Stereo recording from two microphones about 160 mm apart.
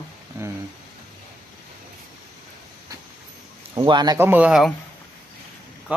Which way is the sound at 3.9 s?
25° right (ahead or behind).